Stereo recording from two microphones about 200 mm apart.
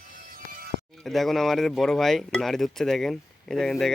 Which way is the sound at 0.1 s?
40° right (ahead or behind).